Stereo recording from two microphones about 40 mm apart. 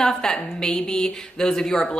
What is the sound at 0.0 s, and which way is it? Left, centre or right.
A man's voice, centre.